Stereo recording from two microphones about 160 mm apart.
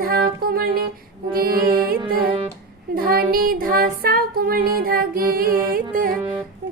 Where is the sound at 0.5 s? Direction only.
65° right (ahead or behind).